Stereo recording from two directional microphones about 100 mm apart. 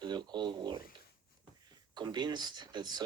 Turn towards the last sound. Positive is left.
turn(degrees=-45)  # may be behind; listen again after turning